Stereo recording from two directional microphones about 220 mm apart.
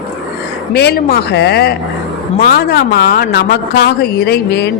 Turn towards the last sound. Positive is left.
turn(degrees=45)  # may be behind; listen again after turning